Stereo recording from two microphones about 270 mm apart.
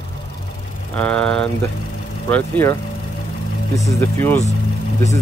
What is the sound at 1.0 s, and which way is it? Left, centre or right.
Speech, centre.